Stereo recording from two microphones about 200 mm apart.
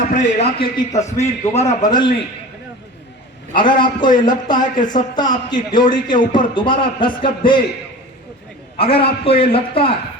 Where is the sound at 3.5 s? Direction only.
25° left (ahead or behind).